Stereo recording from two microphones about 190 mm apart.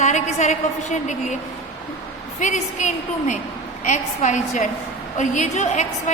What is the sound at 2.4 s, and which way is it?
A woman's voice, 40° left (ahead or behind).